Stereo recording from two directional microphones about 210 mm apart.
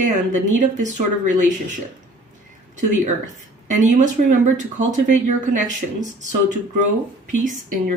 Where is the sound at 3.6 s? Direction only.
35° right (ahead or behind).